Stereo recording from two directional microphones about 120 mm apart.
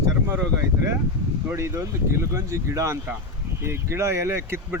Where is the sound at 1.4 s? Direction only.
25° right (ahead or behind).